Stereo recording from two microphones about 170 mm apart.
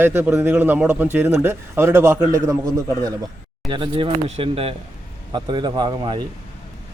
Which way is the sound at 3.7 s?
30° right (ahead or behind).